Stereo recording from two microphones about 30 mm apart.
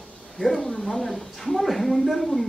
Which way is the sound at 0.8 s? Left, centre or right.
Centre.